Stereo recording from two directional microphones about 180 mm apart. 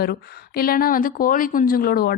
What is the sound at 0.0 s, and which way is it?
Speech, 60° left (ahead or behind).